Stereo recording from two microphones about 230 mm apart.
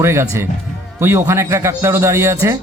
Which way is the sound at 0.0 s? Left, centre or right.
Centre.